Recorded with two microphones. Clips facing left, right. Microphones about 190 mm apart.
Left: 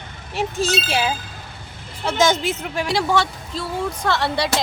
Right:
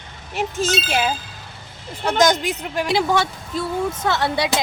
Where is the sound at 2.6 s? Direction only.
Centre (ahead or behind).